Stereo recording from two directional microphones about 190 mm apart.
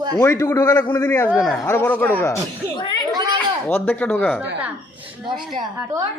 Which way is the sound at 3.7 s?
10° left (ahead or behind).